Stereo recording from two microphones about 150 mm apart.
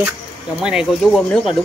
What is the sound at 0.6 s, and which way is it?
Speech, 5° right (ahead or behind).